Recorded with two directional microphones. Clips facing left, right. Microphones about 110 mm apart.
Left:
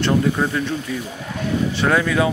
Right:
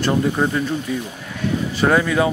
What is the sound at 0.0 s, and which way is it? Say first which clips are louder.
Speech: even; 5° right (ahead or behind).